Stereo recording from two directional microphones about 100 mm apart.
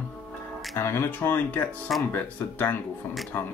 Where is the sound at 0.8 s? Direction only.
25° left (ahead or behind).